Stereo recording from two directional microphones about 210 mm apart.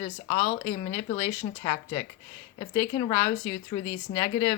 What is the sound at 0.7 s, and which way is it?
Speech, 30° left (ahead or behind).